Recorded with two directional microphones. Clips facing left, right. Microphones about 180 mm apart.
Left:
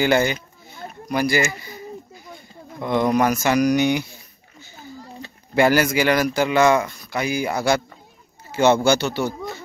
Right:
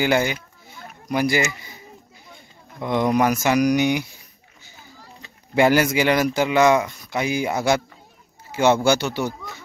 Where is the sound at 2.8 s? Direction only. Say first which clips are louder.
Left 1 dB; 15° right (ahead or behind).